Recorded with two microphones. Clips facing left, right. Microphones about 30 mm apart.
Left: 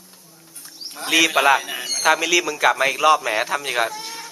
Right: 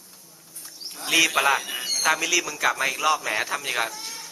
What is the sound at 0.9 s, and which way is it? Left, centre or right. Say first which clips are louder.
Speech: left 3 dB; centre.